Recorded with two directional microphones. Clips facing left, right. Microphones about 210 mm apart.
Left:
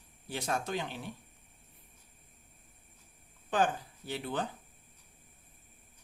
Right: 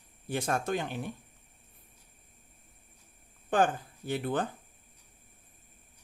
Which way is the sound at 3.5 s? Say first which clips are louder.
Right 3 dB; 50° right (ahead or behind).